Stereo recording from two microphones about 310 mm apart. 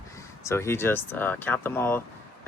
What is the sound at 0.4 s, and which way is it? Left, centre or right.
Speech, centre.